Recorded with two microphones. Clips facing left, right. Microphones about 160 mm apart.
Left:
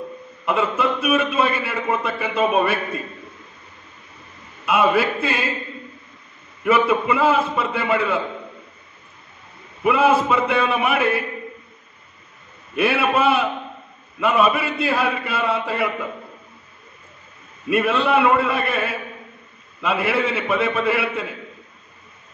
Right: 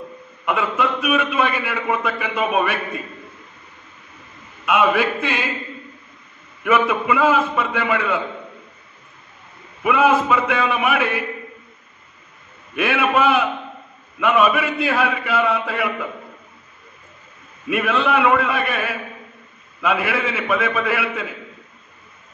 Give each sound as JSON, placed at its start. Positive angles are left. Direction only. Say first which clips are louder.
{"t": 0.5, "sound": "a man's voice", "louder": "left 1 dB", "side_deg": 30}
{"t": 4.6, "sound": "a man's voice", "louder": "even", "side_deg": 30}
{"t": 6.6, "sound": "a man's voice", "louder": "left 1 dB", "side_deg": 30}
{"t": 9.8, "sound": "a man's voice", "louder": "even", "side_deg": 30}
{"t": 12.7, "sound": "chant", "louder": "even", "side_deg": 30}
{"t": 17.6, "sound": "chant", "louder": "left 1 dB", "side_deg": 30}